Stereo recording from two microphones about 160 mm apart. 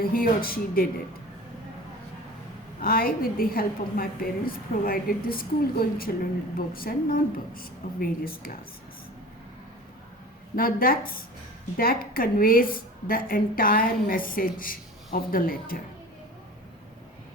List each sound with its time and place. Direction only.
0.0 s speech: 65° left (ahead or behind)
2.8 s a woman's voice: 65° left (ahead or behind)
10.5 s a woman's voice: 65° left (ahead or behind)